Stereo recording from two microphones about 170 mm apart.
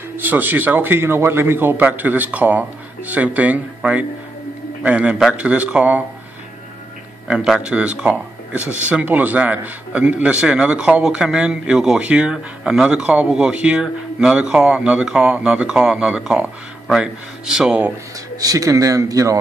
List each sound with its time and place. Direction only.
0.2 s speech: 10° right (ahead or behind)
7.2 s speech: 5° right (ahead or behind)
18.4 s speech: 20° right (ahead or behind)